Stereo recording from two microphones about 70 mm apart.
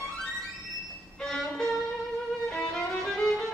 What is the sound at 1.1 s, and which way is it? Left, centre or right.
Music, centre.